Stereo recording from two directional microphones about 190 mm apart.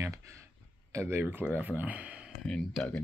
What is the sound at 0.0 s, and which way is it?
Clicking, 15° right (ahead or behind).